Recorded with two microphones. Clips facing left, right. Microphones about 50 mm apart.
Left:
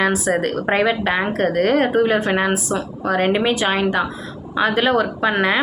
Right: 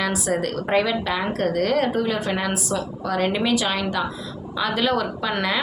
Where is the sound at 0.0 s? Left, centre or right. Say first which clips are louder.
Left 5 dB; left.